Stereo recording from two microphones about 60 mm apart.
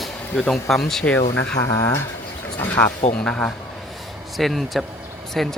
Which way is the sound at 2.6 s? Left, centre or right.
Left.